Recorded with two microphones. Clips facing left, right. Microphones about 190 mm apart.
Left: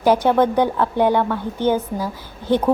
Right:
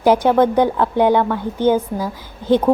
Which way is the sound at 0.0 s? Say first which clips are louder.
Right 2 dB; 10° right (ahead or behind).